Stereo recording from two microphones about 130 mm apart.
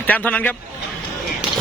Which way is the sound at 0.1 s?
10° left (ahead or behind).